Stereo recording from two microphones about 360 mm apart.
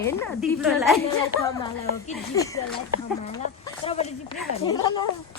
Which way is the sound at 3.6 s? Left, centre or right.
Centre.